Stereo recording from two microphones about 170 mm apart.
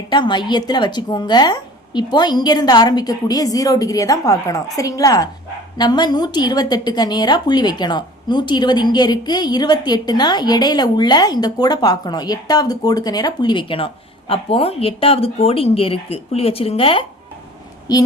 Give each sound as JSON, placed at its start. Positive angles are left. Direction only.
{"t": 0.1, "sound": "a woman's voice", "side_deg": 25}